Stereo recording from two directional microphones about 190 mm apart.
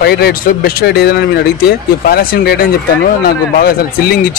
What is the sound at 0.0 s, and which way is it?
Speech, 55° left (ahead or behind).